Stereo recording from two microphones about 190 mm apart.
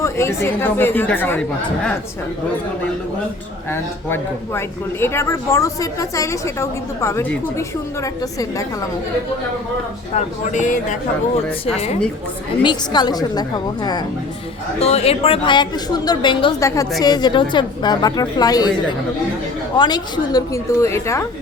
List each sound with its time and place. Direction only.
0.0 s speech: 15° left (ahead or behind)
3.7 s speech: 10° left (ahead or behind)
10.2 s speech: 40° left (ahead or behind)
12.6 s a woman's voice: 20° left (ahead or behind)
14.8 s a woman's voice: 35° left (ahead or behind)
19.7 s speech: 20° left (ahead or behind)